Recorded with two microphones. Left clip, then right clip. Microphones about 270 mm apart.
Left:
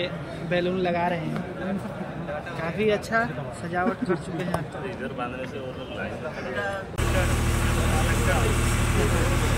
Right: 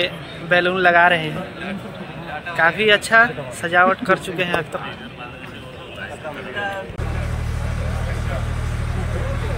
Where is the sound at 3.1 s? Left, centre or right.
Right.